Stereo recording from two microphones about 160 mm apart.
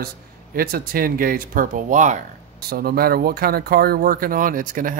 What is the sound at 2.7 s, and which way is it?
Speech, 70° right (ahead or behind).